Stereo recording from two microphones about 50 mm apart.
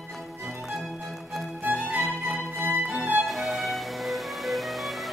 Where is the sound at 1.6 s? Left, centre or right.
Right.